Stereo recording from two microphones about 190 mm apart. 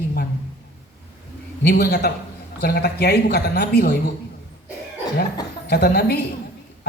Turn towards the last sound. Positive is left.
turn(degrees=60)  # may be behind; listen again after turning